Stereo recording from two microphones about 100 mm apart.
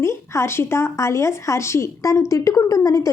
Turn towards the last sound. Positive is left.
turn(degrees=35)  # may be behind; listen again after turning